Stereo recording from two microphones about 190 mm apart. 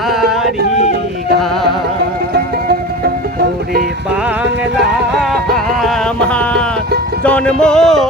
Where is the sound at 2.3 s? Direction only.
55° right (ahead or behind).